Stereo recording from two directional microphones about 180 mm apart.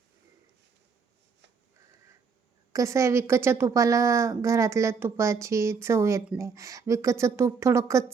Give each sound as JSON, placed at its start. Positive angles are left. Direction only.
{"t": 2.7, "sound": "a woman's voice", "side_deg": -15}